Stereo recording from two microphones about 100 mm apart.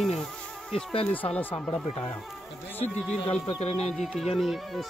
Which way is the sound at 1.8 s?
65° left (ahead or behind).